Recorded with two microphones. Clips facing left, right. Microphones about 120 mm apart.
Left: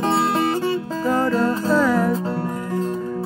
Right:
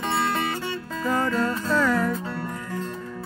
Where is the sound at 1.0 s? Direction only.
5° left (ahead or behind).